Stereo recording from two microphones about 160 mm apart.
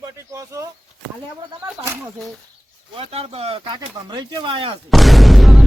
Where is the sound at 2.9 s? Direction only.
40° right (ahead or behind).